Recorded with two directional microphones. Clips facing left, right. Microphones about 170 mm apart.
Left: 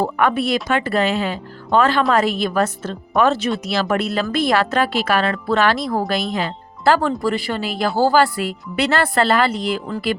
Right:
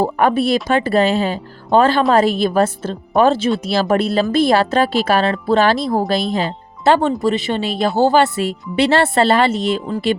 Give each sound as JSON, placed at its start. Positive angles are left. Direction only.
{"t": 0.0, "sound": "speech", "side_deg": -35}